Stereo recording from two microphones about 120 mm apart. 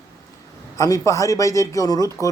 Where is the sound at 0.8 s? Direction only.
25° left (ahead or behind).